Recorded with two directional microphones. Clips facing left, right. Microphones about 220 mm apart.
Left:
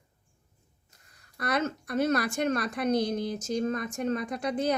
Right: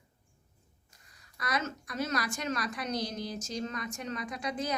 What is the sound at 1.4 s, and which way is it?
A woman's voice, 60° left (ahead or behind).